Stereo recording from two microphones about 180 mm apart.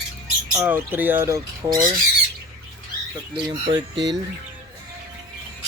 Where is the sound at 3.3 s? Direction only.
25° right (ahead or behind).